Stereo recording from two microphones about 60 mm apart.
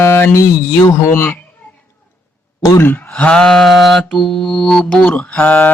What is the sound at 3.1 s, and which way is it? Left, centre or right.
Mantra, centre.